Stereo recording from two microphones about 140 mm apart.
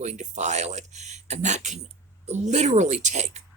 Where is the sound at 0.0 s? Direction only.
55° right (ahead or behind).